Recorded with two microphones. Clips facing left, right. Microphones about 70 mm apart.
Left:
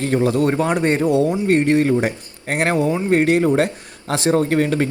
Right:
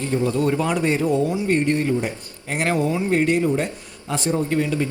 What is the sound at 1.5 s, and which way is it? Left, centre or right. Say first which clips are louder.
Speech: left 6 dB; left.